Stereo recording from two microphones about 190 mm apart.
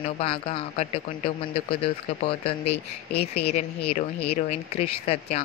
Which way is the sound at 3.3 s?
35° left (ahead or behind).